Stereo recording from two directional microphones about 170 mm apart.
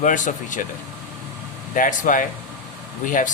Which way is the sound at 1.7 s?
50° left (ahead or behind).